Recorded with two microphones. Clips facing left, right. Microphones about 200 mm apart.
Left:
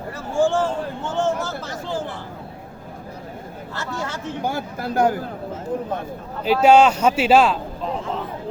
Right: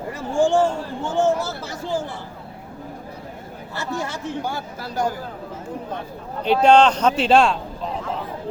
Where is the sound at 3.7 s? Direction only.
10° right (ahead or behind).